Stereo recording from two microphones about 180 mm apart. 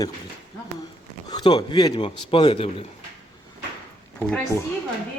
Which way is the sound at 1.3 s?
25° left (ahead or behind).